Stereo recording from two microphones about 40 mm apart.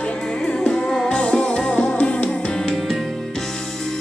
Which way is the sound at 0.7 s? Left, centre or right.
Centre.